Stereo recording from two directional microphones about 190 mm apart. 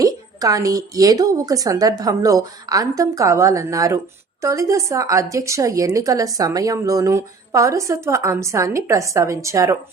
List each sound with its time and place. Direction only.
0.0 s a woman's voice: 20° right (ahead or behind)